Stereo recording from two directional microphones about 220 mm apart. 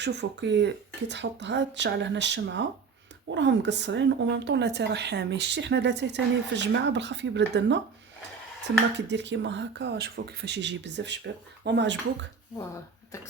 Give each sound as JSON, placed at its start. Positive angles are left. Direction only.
{"t": 0.0, "sound": "a woman's voice", "side_deg": -50}